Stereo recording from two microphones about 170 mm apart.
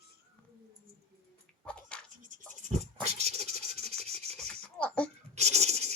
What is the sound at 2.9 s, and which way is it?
Rub, 40° right (ahead or behind).